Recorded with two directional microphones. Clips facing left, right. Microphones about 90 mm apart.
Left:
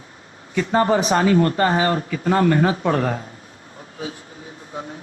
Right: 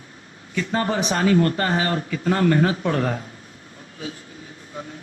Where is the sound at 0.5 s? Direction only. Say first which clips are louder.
Left 5 dB; 30° left (ahead or behind).